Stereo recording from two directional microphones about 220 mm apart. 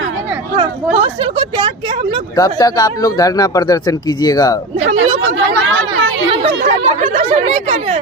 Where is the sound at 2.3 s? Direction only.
15° left (ahead or behind).